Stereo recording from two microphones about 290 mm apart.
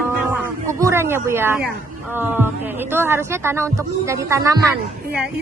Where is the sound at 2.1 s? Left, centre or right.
Centre.